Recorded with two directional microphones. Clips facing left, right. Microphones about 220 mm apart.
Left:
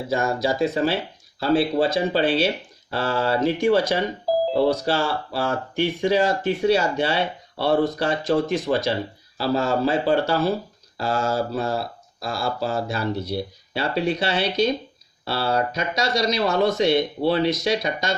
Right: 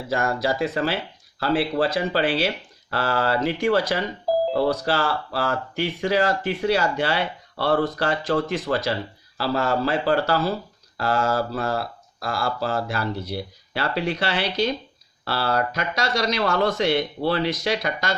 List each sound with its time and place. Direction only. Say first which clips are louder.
0.1 s speech: left 1 dB; 25° left (ahead or behind)